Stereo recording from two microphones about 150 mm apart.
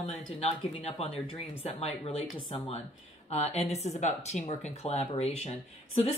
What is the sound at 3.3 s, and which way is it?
Speech, 45° left (ahead or behind).